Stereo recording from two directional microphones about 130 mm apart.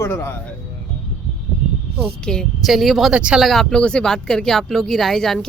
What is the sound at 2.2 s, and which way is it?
Speech, 5° left (ahead or behind).